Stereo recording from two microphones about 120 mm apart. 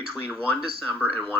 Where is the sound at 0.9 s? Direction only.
15° left (ahead or behind).